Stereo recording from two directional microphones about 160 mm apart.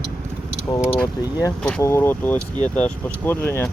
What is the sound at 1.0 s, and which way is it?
Speech, 20° left (ahead or behind).